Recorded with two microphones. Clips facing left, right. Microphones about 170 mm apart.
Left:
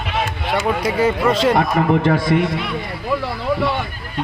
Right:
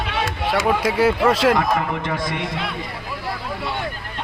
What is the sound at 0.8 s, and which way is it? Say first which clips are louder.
Speech: left 1 dB; 5° right (ahead or behind).